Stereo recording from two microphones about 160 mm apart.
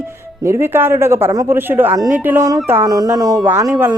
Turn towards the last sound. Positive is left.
turn(degrees=-20)  # may be behind; listen again after turning